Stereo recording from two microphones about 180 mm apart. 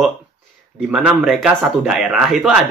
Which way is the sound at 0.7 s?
5° right (ahead or behind).